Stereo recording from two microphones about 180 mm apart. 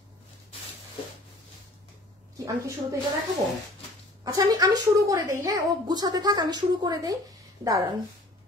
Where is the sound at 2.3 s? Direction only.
20° right (ahead or behind).